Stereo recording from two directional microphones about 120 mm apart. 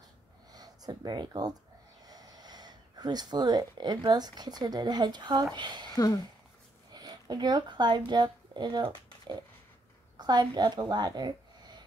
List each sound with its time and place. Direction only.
0.5 s speech: 35° right (ahead or behind)
6.9 s speech: 35° right (ahead or behind)
10.1 s speech: 35° right (ahead or behind)